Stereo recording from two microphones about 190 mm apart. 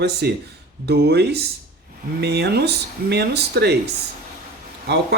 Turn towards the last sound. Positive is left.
turn(degrees=-60)  # may be behind; listen again after turning